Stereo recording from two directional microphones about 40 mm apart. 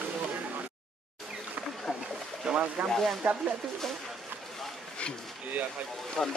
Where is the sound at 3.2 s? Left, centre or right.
Right.